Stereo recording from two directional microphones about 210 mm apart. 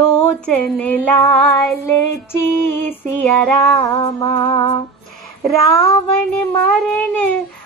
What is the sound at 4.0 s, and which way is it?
Music, 20° left (ahead or behind).